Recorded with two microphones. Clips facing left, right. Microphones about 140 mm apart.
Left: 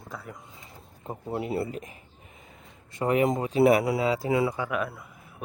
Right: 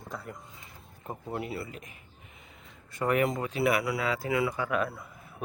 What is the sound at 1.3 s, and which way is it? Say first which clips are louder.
Speech: left 7 dB; 25° left (ahead or behind).